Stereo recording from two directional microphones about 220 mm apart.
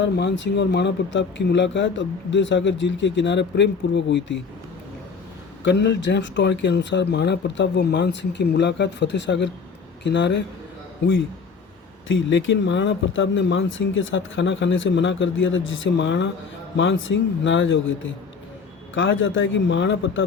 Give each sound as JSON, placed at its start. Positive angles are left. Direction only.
{"t": 0.0, "sound": "speech", "side_deg": 55}
{"t": 5.6, "sound": "speech", "side_deg": 50}
{"t": 12.0, "sound": "speech", "side_deg": 60}